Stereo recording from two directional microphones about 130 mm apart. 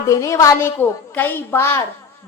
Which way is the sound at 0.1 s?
25° left (ahead or behind).